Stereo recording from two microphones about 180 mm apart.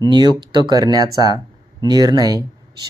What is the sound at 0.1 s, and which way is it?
Speech, 25° right (ahead or behind).